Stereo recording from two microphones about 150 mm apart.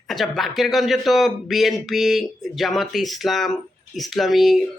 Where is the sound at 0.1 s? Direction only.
Centre (ahead or behind).